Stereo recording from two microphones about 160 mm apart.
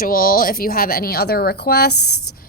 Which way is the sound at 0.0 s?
65° left (ahead or behind).